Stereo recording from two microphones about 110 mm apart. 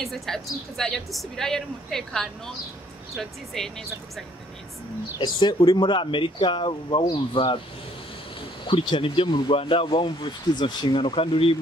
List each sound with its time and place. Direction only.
0.0 s a woman's voice: centre (ahead or behind)
5.2 s speech: 45° left (ahead or behind)